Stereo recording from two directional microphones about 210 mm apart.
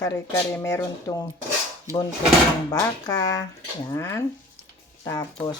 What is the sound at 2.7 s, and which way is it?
Speech, 15° left (ahead or behind).